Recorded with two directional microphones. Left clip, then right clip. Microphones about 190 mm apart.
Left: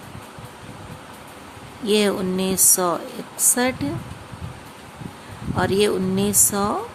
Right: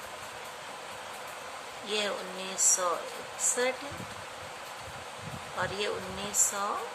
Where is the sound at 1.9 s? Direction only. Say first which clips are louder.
Left 12 dB; 60° left (ahead or behind).